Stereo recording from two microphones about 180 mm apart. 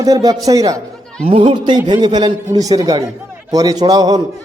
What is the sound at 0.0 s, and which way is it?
A man's voice, 20° right (ahead or behind).